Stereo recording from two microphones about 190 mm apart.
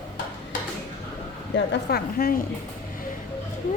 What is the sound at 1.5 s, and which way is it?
Speech, 60° left (ahead or behind).